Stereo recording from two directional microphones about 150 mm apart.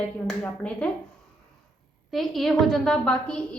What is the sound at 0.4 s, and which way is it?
Speech, 5° left (ahead or behind).